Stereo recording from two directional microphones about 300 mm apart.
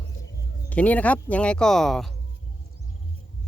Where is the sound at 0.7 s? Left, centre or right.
Centre.